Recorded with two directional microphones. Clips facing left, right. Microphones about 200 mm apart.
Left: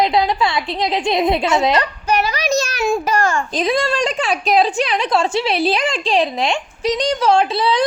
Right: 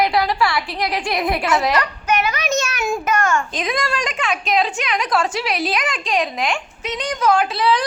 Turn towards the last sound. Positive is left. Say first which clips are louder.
# left 3 dB
turn(degrees=25)  # may be behind; listen again after turning